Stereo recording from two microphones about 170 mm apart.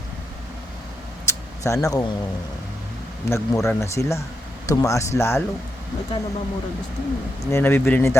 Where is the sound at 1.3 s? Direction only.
20° left (ahead or behind).